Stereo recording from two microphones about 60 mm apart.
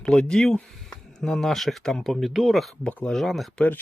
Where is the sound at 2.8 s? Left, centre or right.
Centre.